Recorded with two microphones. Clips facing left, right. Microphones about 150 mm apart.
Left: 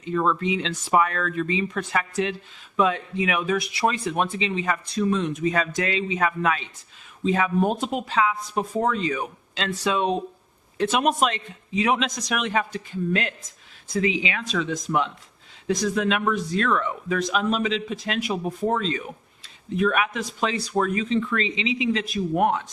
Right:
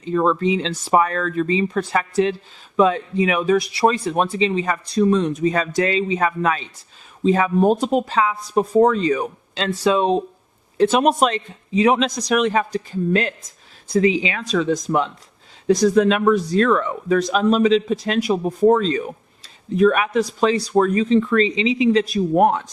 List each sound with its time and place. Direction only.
0.0 s speech: 35° right (ahead or behind)